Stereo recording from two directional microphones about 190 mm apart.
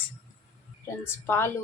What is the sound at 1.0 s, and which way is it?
Speech, 10° left (ahead or behind).